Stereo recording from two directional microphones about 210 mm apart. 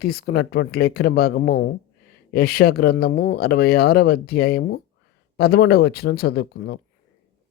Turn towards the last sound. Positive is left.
turn(degrees=50)  # may be behind; listen again after turning